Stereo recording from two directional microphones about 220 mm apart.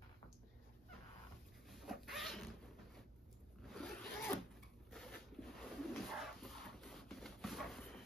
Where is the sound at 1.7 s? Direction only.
Centre (ahead or behind).